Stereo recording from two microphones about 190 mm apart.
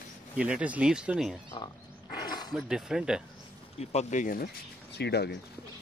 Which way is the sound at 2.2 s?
20° left (ahead or behind).